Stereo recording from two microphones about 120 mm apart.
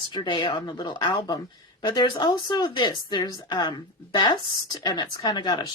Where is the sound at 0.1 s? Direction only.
40° left (ahead or behind).